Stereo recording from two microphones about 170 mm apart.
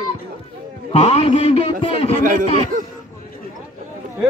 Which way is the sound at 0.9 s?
35° left (ahead or behind).